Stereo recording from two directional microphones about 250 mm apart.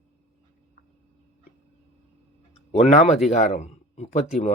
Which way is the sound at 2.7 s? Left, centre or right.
Left.